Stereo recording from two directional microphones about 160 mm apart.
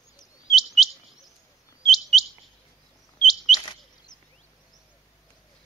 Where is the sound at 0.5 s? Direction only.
Centre (ahead or behind).